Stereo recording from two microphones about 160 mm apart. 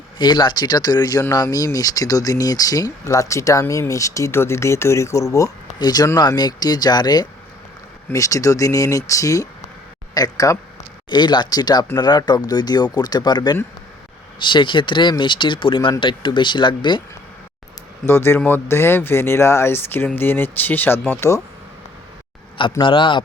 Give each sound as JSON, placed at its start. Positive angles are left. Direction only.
{"t": 0.2, "sound": "speech", "side_deg": 30}
{"t": 18.0, "sound": "speech", "side_deg": 15}
{"t": 22.8, "sound": "a man's voice", "side_deg": 30}